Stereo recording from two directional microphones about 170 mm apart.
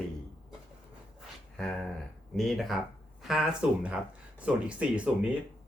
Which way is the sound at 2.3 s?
Centre (ahead or behind).